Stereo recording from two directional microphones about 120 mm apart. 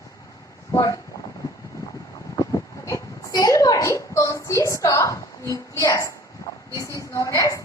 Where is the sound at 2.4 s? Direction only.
25° left (ahead or behind).